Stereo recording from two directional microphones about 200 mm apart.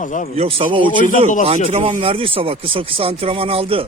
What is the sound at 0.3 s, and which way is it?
Speech, 30° right (ahead or behind).